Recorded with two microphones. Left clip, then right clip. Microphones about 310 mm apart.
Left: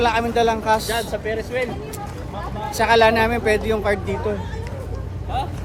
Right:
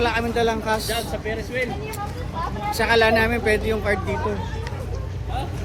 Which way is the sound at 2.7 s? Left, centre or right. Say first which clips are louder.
Left 3 dB; centre.